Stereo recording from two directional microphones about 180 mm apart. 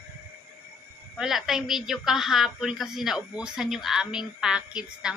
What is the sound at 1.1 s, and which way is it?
A woman's voice, centre (ahead or behind).